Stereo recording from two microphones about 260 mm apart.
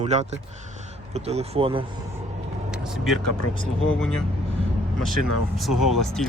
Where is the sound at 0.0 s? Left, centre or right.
Right.